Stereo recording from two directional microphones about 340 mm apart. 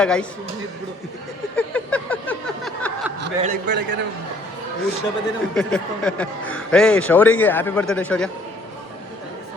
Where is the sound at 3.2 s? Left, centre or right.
Right.